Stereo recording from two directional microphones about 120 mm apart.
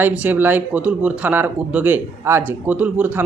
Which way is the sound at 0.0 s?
10° right (ahead or behind).